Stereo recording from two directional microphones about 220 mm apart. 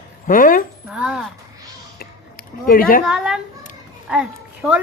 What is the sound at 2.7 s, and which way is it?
Speech, 40° left (ahead or behind).